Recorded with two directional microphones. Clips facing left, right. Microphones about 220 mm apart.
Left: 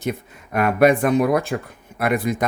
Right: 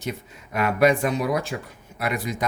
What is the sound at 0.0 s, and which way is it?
Speech, 55° left (ahead or behind).